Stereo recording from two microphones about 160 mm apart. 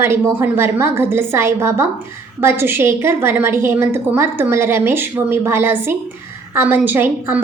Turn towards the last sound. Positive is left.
turn(degrees=-15)  # may be behind; listen again after turning